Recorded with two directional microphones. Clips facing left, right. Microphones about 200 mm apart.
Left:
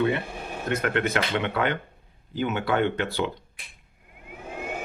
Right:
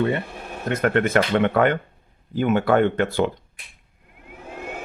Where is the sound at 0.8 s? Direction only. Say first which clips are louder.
Right 8 dB; 50° right (ahead or behind).